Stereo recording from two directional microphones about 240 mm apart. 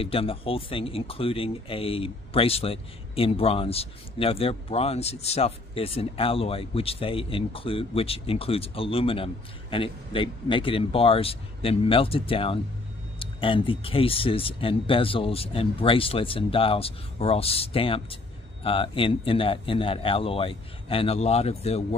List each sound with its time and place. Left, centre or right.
0.0 s speech: left